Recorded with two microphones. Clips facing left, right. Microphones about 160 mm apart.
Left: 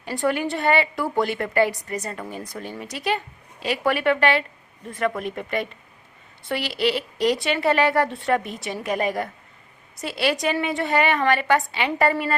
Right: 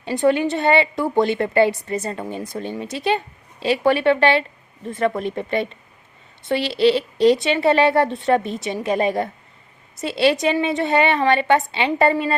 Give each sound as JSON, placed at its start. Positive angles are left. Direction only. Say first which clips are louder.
{"t": 0.0, "sound": "a woman's voice", "louder": "right 6 dB", "side_deg": -25}